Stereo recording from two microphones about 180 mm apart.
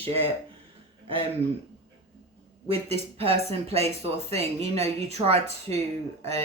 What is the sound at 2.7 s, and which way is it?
Speech, 35° right (ahead or behind).